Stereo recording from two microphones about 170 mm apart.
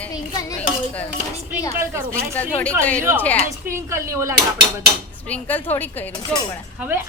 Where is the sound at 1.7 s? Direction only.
15° right (ahead or behind).